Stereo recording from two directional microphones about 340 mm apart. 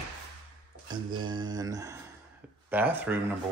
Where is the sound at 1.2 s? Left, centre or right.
Centre.